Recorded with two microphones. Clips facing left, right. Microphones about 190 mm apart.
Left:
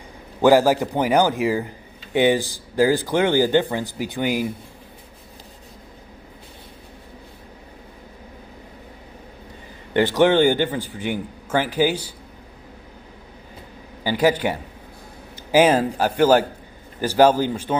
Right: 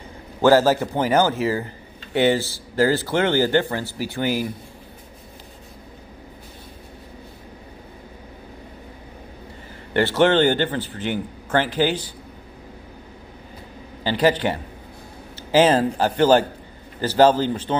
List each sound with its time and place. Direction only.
0.4 s a man's voice: 15° left (ahead or behind)
9.9 s a man's voice: 15° left (ahead or behind)
14.0 s a man's voice: 10° left (ahead or behind)